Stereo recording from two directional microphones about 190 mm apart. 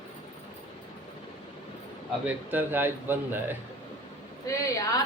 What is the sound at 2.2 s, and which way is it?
Speech, 10° right (ahead or behind).